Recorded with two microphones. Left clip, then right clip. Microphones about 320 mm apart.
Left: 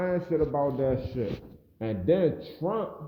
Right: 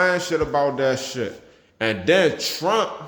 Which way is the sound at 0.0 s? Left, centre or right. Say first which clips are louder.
Right 7 dB; centre.